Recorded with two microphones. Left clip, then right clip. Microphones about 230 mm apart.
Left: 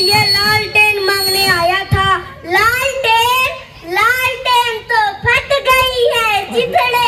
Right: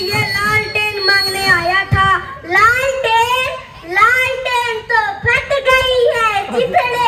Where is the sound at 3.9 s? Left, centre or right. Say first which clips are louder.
Right 1 dB; left.